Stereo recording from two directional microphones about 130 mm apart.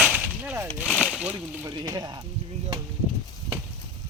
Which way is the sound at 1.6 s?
30° right (ahead or behind).